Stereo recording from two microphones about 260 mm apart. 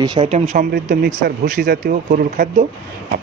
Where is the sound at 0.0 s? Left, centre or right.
Centre.